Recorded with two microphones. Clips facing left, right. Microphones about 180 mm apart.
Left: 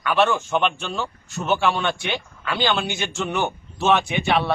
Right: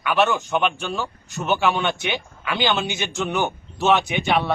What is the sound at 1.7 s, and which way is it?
A man's voice, 20° right (ahead or behind).